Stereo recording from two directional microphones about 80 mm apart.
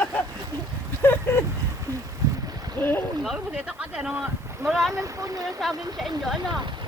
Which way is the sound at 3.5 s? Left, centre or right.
Centre.